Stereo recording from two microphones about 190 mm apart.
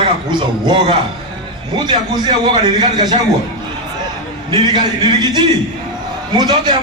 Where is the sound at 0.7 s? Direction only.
25° right (ahead or behind).